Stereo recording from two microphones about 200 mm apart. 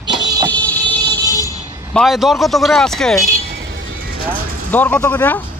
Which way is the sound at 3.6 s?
60° right (ahead or behind).